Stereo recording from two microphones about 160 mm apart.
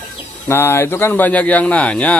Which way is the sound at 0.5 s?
15° left (ahead or behind).